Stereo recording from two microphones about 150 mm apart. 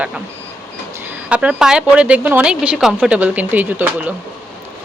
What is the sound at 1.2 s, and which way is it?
Speech, 5° right (ahead or behind).